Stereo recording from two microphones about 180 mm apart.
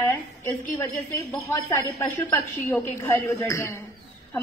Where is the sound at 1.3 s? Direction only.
10° left (ahead or behind).